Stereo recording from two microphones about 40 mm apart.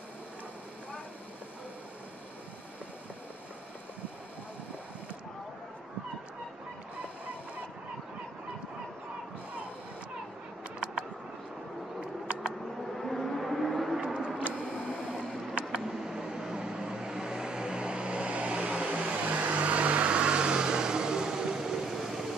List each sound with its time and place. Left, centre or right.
12.9 s a sound: centre
13.4 s vehicle: centre
14.0 s vehicle: right
14.6 s printer: centre
15.0 s a sound: right
15.9 s vehicle: centre